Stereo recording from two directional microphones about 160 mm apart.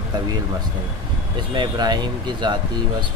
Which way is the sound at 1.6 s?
25° right (ahead or behind).